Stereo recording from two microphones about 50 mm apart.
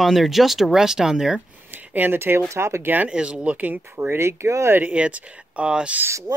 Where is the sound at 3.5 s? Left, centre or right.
Right.